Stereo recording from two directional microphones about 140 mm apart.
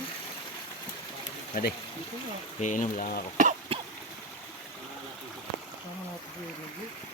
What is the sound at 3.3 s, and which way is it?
Cough, 65° right (ahead or behind).